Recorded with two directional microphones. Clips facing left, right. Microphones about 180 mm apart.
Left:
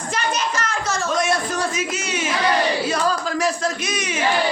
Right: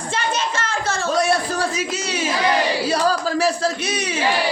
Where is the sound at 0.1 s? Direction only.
30° right (ahead or behind).